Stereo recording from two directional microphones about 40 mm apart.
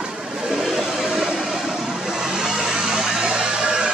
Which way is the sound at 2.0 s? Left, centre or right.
Centre.